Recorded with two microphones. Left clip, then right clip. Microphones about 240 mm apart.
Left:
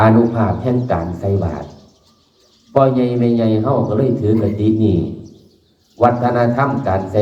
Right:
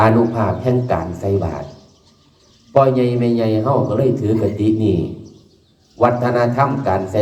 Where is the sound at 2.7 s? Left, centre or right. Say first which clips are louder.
Even; right.